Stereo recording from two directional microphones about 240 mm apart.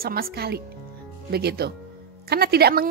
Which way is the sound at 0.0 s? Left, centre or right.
Right.